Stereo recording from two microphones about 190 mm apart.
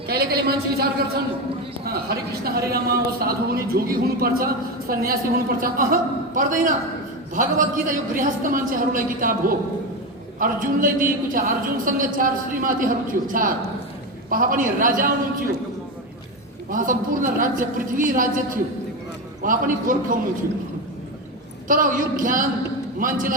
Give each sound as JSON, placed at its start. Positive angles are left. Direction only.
{"t": 0.1, "sound": "a man's voice", "side_deg": -55}
{"t": 10.4, "sound": "a man's voice", "side_deg": -45}
{"t": 16.7, "sound": "a man's voice", "side_deg": -45}
{"t": 21.7, "sound": "a man's voice", "side_deg": -45}